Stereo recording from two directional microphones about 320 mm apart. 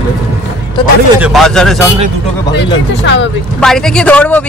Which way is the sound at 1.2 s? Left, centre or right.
Centre.